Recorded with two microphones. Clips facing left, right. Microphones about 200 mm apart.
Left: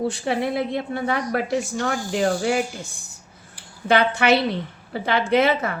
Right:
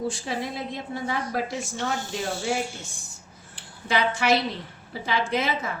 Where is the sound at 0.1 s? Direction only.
60° left (ahead or behind).